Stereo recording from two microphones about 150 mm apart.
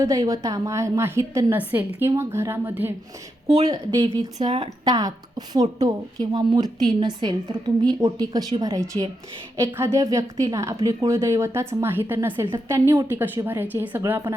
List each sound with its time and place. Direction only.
0.0 s a woman's voice: 20° right (ahead or behind)
3.7 s a woman's voice: 35° right (ahead or behind); by 14.3 s 15° right (ahead or behind)